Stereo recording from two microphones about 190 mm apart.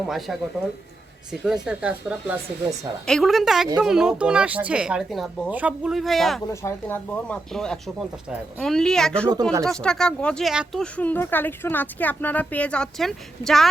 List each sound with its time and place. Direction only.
0.0 s speech: centre (ahead or behind)
6.5 s speech: 15° left (ahead or behind)
9.3 s speech: 20° right (ahead or behind)
9.6 s speech: 5° left (ahead or behind)